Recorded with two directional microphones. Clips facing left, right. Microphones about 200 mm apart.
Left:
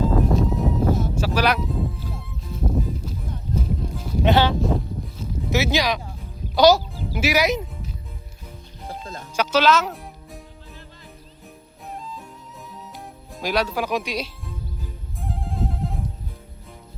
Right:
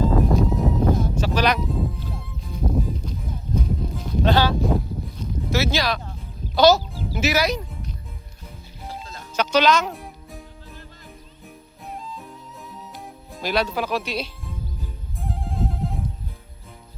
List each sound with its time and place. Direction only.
0.0 s music: centre (ahead or behind)
4.3 s speech: 20° left (ahead or behind)
8.9 s music: 50° left (ahead or behind)
9.3 s music: 5° left (ahead or behind)
11.9 s music: centre (ahead or behind)
13.4 s speech: 10° left (ahead or behind)
15.2 s music: centre (ahead or behind)